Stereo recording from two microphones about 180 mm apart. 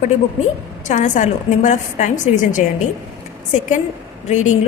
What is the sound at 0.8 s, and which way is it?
A woman's voice, 45° left (ahead or behind).